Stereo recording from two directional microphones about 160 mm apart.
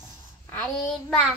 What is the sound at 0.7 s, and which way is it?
Child singing, 5° left (ahead or behind).